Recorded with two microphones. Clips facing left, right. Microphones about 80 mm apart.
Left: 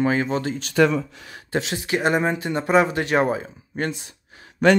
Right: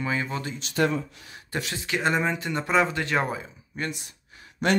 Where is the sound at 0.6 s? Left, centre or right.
Left.